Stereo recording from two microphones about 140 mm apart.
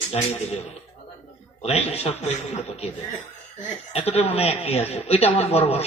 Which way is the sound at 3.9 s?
45° left (ahead or behind).